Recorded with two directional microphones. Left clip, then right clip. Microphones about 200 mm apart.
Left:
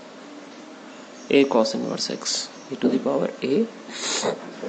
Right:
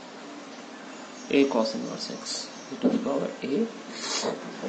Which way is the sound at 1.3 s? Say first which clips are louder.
Left 5 dB; 50° left (ahead or behind).